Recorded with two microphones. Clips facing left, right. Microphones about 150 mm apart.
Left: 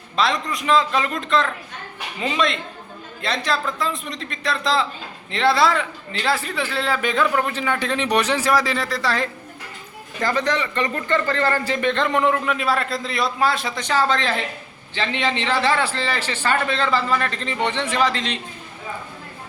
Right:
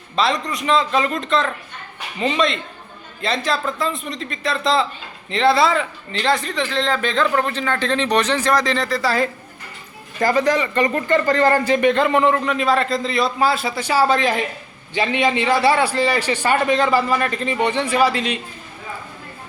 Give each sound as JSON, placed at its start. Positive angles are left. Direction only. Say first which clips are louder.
{"t": 0.2, "sound": "a man's voice", "louder": "right 2 dB", "side_deg": 0}
{"t": 10.2, "sound": "a man's voice", "louder": "right 4 dB", "side_deg": -10}
{"t": 11.3, "sound": "speech", "louder": "right 8 dB", "side_deg": -40}
{"t": 11.6, "sound": "a man's voice", "louder": "right 5 dB", "side_deg": -15}